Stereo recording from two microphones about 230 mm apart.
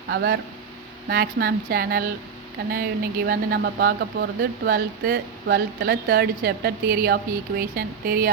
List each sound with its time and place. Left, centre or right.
0.1 s speech: right